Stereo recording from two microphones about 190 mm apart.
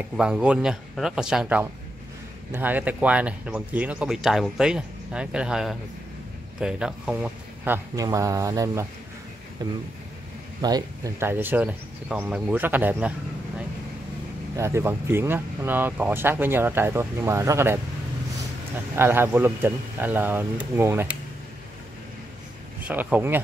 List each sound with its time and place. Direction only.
0.2 s a man's voice: 5° right (ahead or behind)
14.6 s speech: 15° right (ahead or behind)
18.9 s speech: 10° right (ahead or behind)
22.8 s speech: 5° right (ahead or behind)